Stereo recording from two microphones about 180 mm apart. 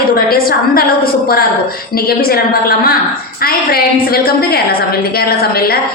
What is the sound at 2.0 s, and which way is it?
A woman's voice, 55° left (ahead or behind).